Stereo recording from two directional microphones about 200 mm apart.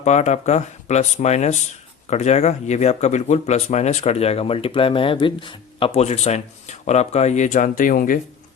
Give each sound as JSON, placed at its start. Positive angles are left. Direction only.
{"t": 0.0, "sound": "speech", "side_deg": 35}